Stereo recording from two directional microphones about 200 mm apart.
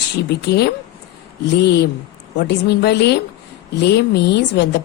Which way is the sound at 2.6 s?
55° left (ahead or behind).